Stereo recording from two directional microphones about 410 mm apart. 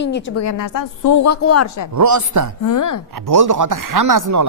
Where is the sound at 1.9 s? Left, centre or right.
Right.